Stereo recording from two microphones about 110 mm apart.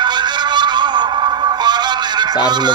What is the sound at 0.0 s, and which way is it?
Music, 40° right (ahead or behind).